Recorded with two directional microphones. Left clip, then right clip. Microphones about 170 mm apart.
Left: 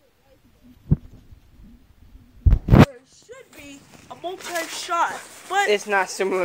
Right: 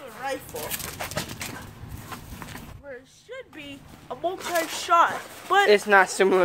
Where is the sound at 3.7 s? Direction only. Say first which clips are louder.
Right 3 dB; 20° right (ahead or behind).